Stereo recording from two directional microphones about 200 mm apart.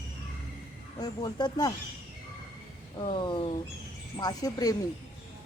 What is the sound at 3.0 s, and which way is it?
A woman's voice, 25° left (ahead or behind).